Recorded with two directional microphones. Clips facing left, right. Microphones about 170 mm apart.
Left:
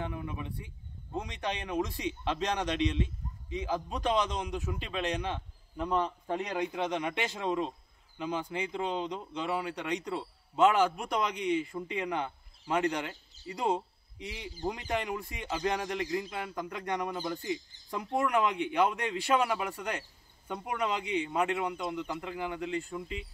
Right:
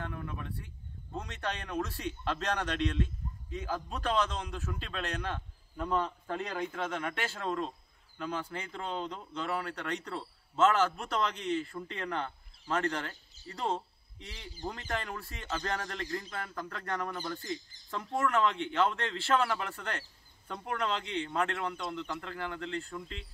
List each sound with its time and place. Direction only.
0.0 s speech: 10° left (ahead or behind)